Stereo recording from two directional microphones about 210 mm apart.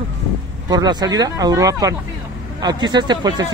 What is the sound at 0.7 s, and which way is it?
Speech, 20° right (ahead or behind).